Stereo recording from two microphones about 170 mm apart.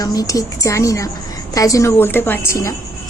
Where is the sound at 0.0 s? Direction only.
20° left (ahead or behind).